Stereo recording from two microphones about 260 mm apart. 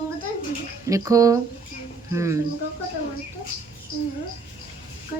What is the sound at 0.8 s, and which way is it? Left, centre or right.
Speech, centre.